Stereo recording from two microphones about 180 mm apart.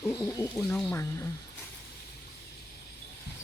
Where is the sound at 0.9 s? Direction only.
15° left (ahead or behind).